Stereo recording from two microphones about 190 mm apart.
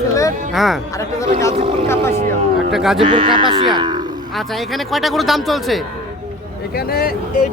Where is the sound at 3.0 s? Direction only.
25° right (ahead or behind).